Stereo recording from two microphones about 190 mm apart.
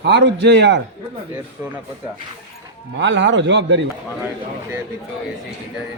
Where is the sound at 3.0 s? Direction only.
75° right (ahead or behind).